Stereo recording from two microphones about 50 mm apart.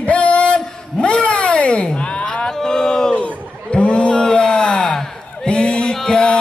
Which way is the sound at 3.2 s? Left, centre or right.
Left.